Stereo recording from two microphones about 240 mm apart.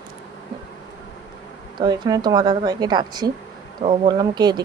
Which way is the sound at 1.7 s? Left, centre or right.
Centre.